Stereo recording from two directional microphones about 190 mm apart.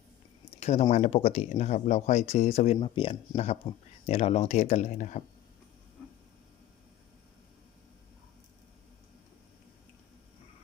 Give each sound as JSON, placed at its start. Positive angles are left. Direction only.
{"t": 0.6, "sound": "speech", "side_deg": 35}